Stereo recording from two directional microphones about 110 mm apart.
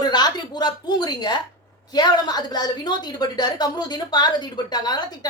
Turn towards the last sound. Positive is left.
turn(degrees=40)  # may be behind; listen again after turning